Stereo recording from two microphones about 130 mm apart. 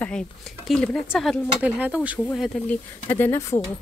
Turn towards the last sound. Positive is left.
turn(degrees=20)  # may be behind; listen again after turning